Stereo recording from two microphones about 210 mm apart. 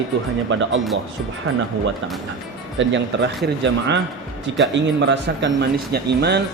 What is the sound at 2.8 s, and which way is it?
Speech, 60° right (ahead or behind).